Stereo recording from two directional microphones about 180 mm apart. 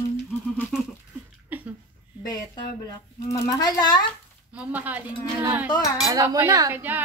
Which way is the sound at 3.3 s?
20° left (ahead or behind).